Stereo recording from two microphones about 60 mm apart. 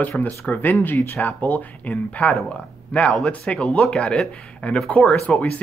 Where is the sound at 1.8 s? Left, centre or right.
Left.